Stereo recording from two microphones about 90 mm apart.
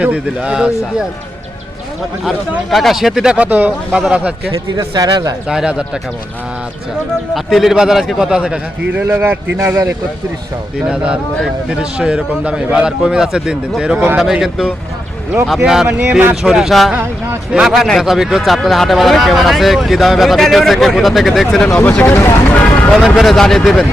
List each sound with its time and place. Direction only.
0.0 s a man's voice: 10° right (ahead or behind)
2.6 s a man's voice: centre (ahead or behind)
4.5 s speech: 45° right (ahead or behind)
5.5 s a man's voice: 10° right (ahead or behind)
7.3 s a man's voice: centre (ahead or behind); by 9.4 s 20° right (ahead or behind)
9.6 s speech: 35° right (ahead or behind)
10.8 s a man's voice: 10° right (ahead or behind)
15.9 s speech: 15° right (ahead or behind)
16.3 s speech: 5° right (ahead or behind)
21.8 s speech: 20° left (ahead or behind)
22.1 s speech: 30° left (ahead or behind)
23.0 s speech: centre (ahead or behind)